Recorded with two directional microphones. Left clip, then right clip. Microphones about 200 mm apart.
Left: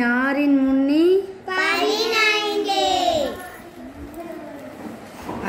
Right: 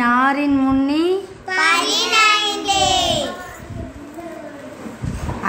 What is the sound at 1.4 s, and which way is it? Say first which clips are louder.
Child singing: right 7 dB; 40° right (ahead or behind).